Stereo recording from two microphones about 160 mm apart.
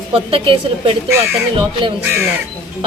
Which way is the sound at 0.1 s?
35° right (ahead or behind).